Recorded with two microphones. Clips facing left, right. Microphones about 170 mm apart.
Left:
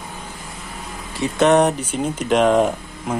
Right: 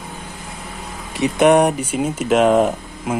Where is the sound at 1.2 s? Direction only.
10° right (ahead or behind).